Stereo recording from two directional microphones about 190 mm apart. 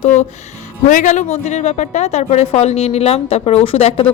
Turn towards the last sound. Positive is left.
turn(degrees=30)  # may be behind; listen again after turning